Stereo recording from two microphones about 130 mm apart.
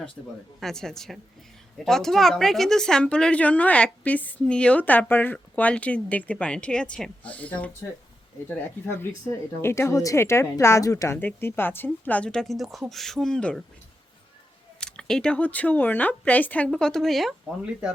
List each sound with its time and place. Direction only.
0.6 s speech: 5° left (ahead or behind)
14.8 s speech: 5° left (ahead or behind)